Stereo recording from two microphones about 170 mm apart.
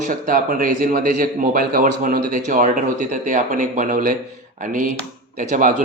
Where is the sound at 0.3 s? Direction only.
55° right (ahead or behind).